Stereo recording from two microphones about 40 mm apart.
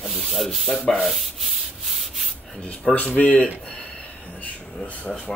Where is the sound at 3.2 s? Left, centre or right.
Left.